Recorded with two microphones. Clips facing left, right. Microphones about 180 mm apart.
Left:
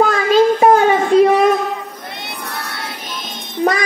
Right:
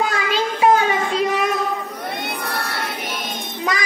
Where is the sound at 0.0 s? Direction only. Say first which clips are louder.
Left 9 dB; 45° left (ahead or behind).